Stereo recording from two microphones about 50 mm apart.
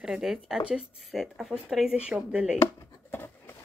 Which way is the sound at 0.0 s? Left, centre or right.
Centre.